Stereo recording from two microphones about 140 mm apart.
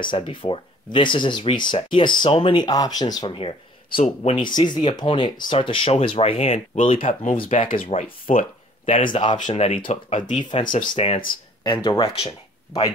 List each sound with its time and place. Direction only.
0.0 s speech: 35° left (ahead or behind)
4.4 s speech: 30° left (ahead or behind)
8.3 s a sound: 70° left (ahead or behind)
9.1 s speech: 35° left (ahead or behind)
10.0 s speech: 60° left (ahead or behind)
10.4 s speech: 35° left (ahead or behind)
10.7 s speech: 75° left (ahead or behind)
11.6 s speech: 35° left (ahead or behind)